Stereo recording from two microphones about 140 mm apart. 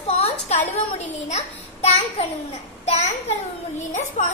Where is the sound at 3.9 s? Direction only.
60° left (ahead or behind).